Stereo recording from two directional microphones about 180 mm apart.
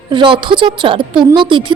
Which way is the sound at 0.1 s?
25° right (ahead or behind).